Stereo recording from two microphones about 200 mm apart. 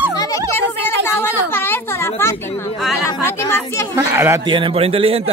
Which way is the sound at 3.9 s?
10° right (ahead or behind).